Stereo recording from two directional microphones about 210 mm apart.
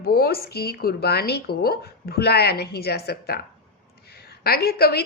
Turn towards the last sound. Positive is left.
turn(degrees=50)  # may be behind; listen again after turning